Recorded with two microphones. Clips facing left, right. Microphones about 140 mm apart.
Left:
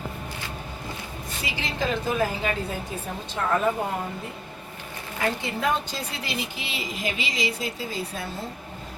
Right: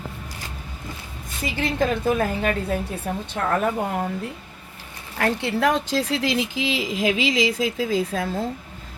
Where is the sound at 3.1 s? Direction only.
55° right (ahead or behind).